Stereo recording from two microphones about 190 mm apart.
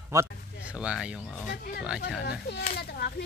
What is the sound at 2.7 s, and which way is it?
Speech, 60° left (ahead or behind).